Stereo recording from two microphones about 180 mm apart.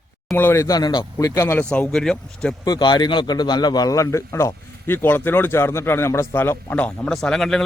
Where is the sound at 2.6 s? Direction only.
25° left (ahead or behind).